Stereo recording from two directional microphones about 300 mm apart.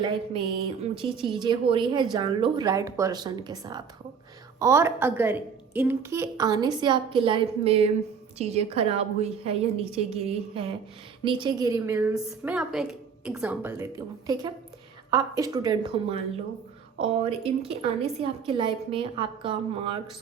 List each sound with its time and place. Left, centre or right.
0.0 s a woman's voice: centre